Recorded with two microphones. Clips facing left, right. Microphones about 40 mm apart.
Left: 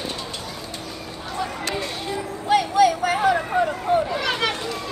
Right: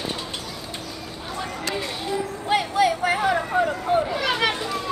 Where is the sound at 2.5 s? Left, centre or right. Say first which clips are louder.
Left 3 dB; centre.